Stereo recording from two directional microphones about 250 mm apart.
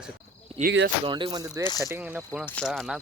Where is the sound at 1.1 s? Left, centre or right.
Centre.